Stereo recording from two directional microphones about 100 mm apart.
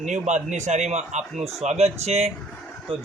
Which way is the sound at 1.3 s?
90° right.